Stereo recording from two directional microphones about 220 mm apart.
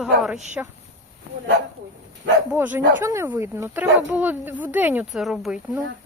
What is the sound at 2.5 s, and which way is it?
Speech, 10° right (ahead or behind).